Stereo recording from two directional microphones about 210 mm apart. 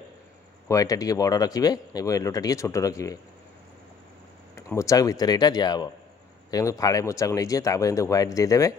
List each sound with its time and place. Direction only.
0.7 s speech: 15° left (ahead or behind)
4.6 s speech: 15° left (ahead or behind)